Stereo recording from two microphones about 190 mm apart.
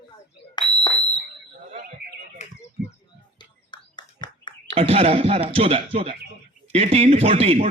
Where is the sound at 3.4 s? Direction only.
25° left (ahead or behind).